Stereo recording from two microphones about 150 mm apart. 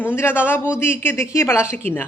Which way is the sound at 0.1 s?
15° left (ahead or behind).